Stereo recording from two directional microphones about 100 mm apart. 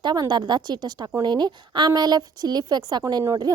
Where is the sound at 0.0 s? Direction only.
45° right (ahead or behind).